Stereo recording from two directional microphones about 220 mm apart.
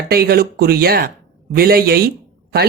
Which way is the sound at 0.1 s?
45° right (ahead or behind).